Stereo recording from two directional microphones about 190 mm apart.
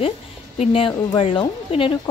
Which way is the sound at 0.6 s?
25° left (ahead or behind).